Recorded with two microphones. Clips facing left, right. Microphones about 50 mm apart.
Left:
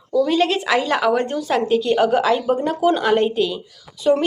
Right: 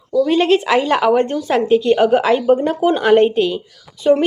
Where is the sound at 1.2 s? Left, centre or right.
Right.